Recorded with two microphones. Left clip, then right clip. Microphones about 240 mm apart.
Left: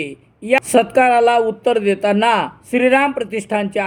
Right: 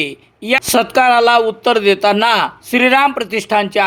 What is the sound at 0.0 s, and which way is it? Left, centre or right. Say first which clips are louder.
A man's voice: right 6 dB; centre.